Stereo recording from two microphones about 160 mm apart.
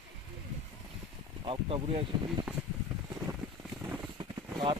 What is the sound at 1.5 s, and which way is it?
Speech, 35° right (ahead or behind).